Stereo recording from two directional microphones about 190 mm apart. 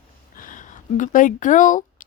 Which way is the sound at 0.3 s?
45° left (ahead or behind).